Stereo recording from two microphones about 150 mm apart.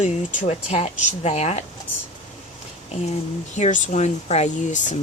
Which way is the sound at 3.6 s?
55° left (ahead or behind).